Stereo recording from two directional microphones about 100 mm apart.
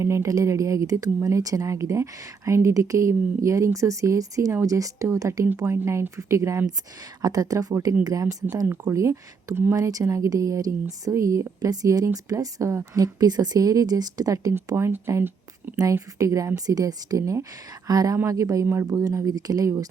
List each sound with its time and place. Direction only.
0.0 s a woman's voice: 30° right (ahead or behind)
8.6 s speech: 15° right (ahead or behind)
8.9 s a woman's voice: 30° right (ahead or behind)
14.7 s speech: 25° right (ahead or behind)
15.8 s a woman's voice: 35° right (ahead or behind)